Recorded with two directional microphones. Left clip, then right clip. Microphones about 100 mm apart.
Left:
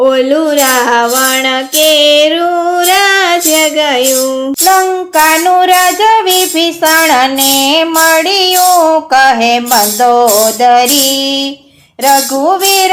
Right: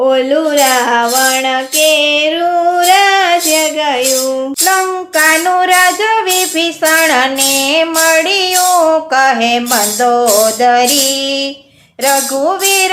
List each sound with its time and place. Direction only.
0.0 s music: 25° left (ahead or behind)
2.6 s female singing: 25° left (ahead or behind)
3.5 s music: 40° left (ahead or behind)
5.1 s music: 25° left (ahead or behind)
12.0 s music: 20° left (ahead or behind)